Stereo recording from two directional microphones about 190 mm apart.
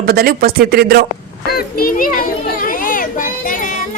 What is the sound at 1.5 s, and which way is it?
Children playing, 50° left (ahead or behind).